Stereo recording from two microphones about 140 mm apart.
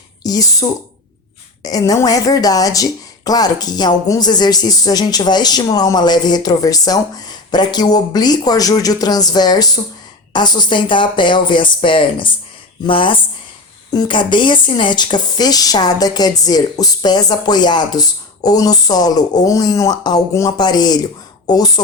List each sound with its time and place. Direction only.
0.2 s speech: 25° left (ahead or behind)